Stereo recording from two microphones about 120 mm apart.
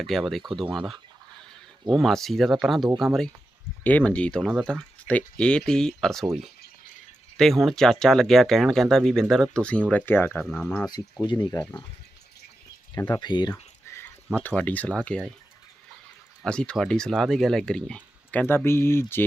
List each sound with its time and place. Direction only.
0.0 s speech: centre (ahead or behind)
3.8 s speech: 10° left (ahead or behind)
10.8 s speech: 35° left (ahead or behind)
11.6 s speech: 10° left (ahead or behind)
12.9 s speech: 35° left (ahead or behind)
13.9 s a sound: 25° left (ahead or behind)
14.4 s speech: 10° left (ahead or behind)
16.4 s speech: 5° left (ahead or behind)